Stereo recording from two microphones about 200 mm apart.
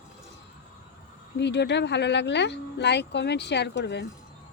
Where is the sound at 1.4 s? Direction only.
60° left (ahead or behind).